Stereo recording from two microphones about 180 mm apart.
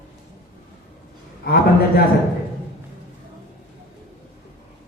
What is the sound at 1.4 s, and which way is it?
Speech, 60° left (ahead or behind).